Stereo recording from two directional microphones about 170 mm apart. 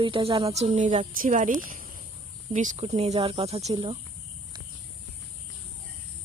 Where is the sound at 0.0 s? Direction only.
30° right (ahead or behind).